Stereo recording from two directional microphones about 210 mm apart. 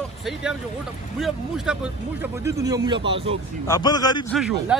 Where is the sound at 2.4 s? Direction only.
15° right (ahead or behind).